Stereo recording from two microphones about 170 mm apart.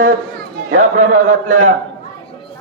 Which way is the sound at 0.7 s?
45° right (ahead or behind).